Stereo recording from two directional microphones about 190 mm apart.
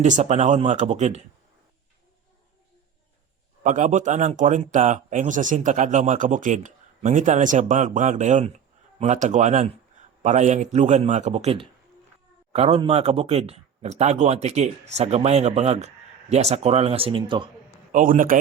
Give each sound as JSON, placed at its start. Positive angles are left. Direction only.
{"t": 0.0, "sound": "speech", "side_deg": -40}
{"t": 3.6, "sound": "speech", "side_deg": -40}
{"t": 17.9, "sound": "a man's voice", "side_deg": -45}